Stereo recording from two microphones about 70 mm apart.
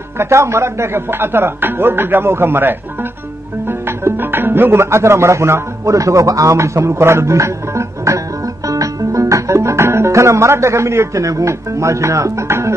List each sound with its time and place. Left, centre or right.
0.2 s a man's voice: right
8.6 s music: right